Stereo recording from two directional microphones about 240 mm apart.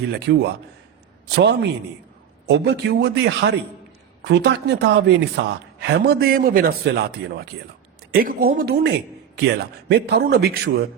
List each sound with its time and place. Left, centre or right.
0.1 s a man's voice: right
8.1 s a man's voice: right